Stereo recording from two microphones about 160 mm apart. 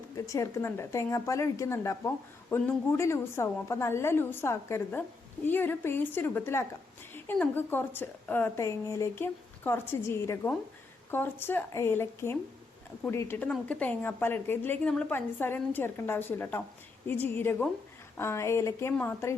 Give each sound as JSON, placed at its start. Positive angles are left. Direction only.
{"t": 0.3, "sound": "speech", "side_deg": 20}